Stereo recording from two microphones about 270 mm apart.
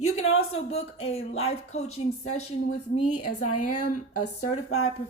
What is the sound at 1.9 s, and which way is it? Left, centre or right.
A woman's voice, left.